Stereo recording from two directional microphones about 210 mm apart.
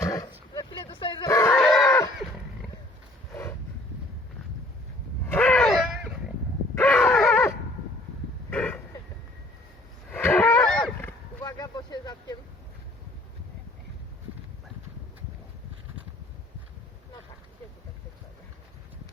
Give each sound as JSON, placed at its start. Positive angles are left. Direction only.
{"t": 0.0, "sound": "dog", "side_deg": 15}
{"t": 0.5, "sound": "livestock", "side_deg": 25}
{"t": 5.2, "sound": "a sound", "side_deg": 10}
{"t": 10.1, "sound": "wild animals", "side_deg": 10}
{"t": 11.4, "sound": "vehicle", "side_deg": 15}